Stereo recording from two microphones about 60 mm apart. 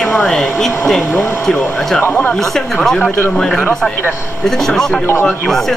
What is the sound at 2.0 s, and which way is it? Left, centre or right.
Speech, left.